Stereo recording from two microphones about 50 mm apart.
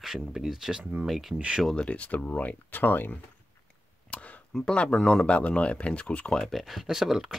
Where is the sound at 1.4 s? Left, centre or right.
Centre.